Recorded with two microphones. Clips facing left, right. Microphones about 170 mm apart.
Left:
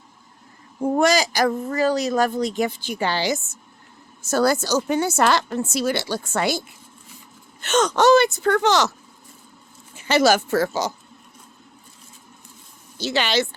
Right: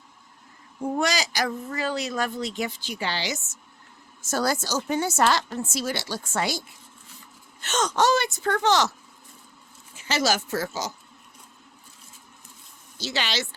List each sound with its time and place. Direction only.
0.9 s speech: 50° left (ahead or behind)
4.3 s a woman's voice: 65° left (ahead or behind)
7.6 s a woman's voice: 65° left (ahead or behind)
9.9 s a woman's voice: 60° left (ahead or behind)
13.0 s a woman's voice: 60° left (ahead or behind)